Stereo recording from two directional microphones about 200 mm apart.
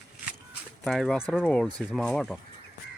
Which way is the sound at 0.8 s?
Centre (ahead or behind).